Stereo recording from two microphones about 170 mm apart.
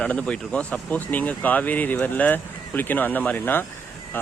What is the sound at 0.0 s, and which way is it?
Speech, 5° left (ahead or behind).